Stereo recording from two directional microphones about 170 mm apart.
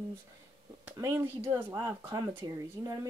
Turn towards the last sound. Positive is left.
turn(degrees=-20)  # may be behind; listen again after turning